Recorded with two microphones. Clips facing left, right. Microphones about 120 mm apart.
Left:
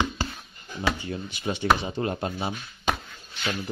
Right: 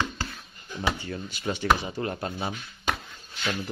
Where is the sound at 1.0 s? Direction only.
20° left (ahead or behind).